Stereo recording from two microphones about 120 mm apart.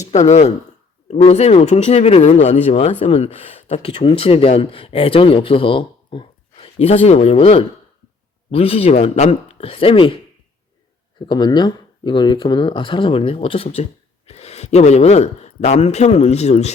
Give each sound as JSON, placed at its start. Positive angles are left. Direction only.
{"t": 0.0, "sound": "speech", "side_deg": 70}
{"t": 11.3, "sound": "speech", "side_deg": 35}